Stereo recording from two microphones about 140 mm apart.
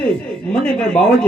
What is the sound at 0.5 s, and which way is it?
Speech, 5° left (ahead or behind).